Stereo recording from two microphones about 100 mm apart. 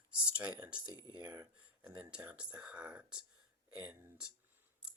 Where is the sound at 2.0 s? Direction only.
10° right (ahead or behind).